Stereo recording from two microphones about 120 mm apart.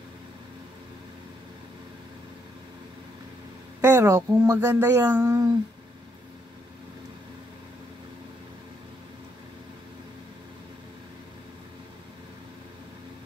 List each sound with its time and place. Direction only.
3.8 s speech: 25° right (ahead or behind)